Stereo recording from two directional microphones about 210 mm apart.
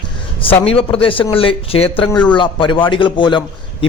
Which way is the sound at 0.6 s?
25° left (ahead or behind).